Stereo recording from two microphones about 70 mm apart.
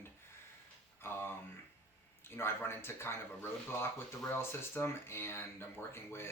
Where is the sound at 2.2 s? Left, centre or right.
Left.